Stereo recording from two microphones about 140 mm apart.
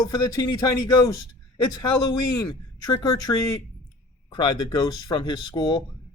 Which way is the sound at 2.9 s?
25° left (ahead or behind).